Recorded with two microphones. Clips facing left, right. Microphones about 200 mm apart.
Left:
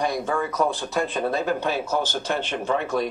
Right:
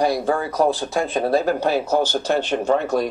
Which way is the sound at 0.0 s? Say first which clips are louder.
Right 5 dB; 35° right (ahead or behind).